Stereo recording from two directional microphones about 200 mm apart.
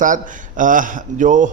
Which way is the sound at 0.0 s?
40° right (ahead or behind).